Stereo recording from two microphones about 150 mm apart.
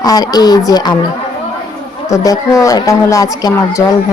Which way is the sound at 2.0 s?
20° left (ahead or behind).